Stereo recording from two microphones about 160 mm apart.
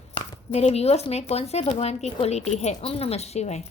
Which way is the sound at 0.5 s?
40° left (ahead or behind).